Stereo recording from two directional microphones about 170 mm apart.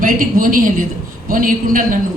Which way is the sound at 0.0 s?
55° right (ahead or behind).